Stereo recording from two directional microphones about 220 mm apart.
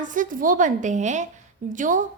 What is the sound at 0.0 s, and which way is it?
A woman's voice, 35° right (ahead or behind).